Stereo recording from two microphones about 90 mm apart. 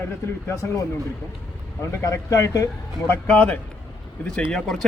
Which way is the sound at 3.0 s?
20° left (ahead or behind).